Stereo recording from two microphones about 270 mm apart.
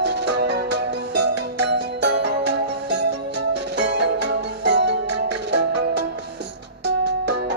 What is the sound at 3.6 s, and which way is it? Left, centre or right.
Music, right.